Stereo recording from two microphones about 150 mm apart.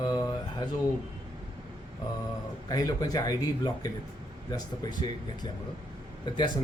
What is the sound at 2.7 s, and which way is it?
Speech, 25° left (ahead or behind).